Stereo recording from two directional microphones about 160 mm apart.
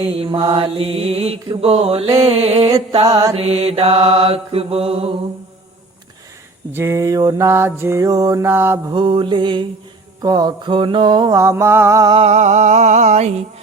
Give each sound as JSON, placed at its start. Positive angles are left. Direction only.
{"t": 0.1, "sound": "mantra", "side_deg": -35}
{"t": 6.7, "sound": "mantra", "side_deg": -15}
{"t": 8.9, "sound": "mantra", "side_deg": -30}
{"t": 12.1, "sound": "music", "side_deg": -45}